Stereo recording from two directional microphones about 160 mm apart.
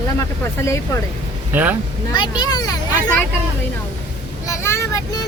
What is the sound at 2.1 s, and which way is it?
Speech, 25° left (ahead or behind).